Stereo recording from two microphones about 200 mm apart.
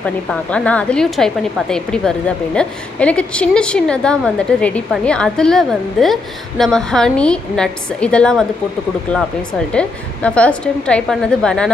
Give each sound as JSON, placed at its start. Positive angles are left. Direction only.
{"t": 0.0, "sound": "a woman's voice", "side_deg": 5}
{"t": 9.7, "sound": "a woman's voice", "side_deg": 5}